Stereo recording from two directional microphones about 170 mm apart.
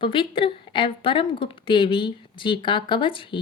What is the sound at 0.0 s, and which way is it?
A woman's voice, 30° left (ahead or behind).